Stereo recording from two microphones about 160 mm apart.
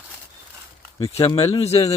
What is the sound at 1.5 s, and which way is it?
Speech, 40° left (ahead or behind).